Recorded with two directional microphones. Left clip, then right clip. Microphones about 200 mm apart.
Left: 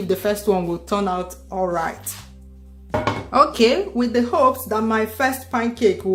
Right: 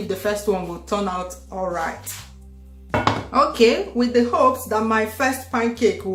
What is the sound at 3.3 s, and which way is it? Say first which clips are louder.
Speech: left 2 dB; 45° left (ahead or behind).